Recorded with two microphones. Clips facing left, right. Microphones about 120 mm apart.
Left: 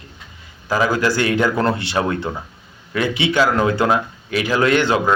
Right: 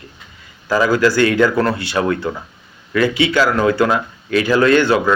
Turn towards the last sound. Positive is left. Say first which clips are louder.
# right 3 dB
turn(degrees=15)  # may be behind; listen again after turning